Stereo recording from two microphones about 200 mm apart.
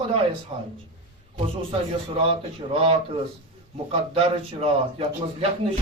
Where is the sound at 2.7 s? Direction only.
30° right (ahead or behind).